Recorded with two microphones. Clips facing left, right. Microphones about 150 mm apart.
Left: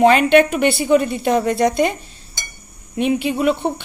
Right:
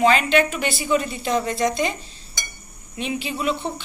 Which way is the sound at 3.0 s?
55° left (ahead or behind).